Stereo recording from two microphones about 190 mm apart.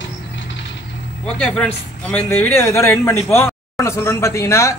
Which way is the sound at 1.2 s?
5° left (ahead or behind).